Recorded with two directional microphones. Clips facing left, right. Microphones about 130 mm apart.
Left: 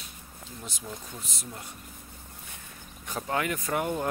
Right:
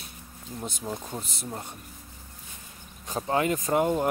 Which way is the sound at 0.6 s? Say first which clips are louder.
Right 7 dB; 40° right (ahead or behind).